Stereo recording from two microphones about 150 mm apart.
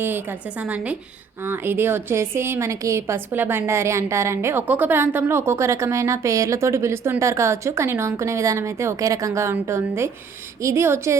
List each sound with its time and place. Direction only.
0.6 s a woman's voice: 10° right (ahead or behind)